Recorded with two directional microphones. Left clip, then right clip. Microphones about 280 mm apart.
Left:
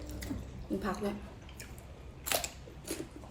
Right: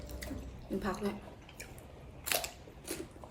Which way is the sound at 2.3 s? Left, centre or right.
Centre.